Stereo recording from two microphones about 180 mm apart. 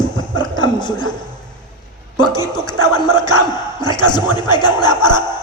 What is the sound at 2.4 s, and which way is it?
Speech, 20° left (ahead or behind).